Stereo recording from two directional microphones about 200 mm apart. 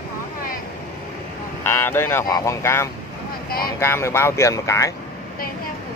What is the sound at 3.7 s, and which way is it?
Speech, 15° left (ahead or behind).